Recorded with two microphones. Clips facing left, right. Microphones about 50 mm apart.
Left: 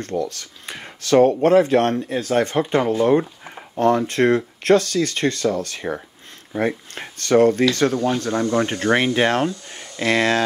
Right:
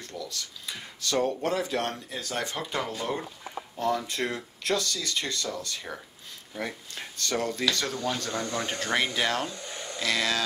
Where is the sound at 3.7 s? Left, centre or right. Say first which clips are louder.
Left 11 dB; left.